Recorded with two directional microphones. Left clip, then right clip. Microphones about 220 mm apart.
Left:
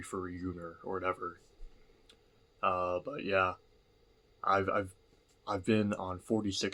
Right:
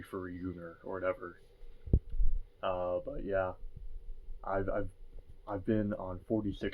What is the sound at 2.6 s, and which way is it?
Speech, 15° left (ahead or behind).